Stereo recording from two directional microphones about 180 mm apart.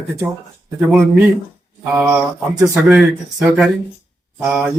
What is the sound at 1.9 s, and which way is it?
A man's voice, 10° right (ahead or behind).